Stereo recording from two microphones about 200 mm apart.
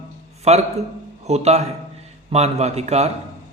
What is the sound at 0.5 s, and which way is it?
A man's voice, 30° right (ahead or behind).